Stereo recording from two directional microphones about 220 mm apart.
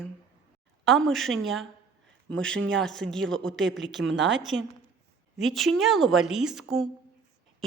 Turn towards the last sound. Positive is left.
turn(degrees=0)  # may be behind; listen again after turning